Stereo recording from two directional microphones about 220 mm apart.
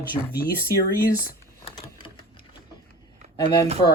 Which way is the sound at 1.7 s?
30° left (ahead or behind).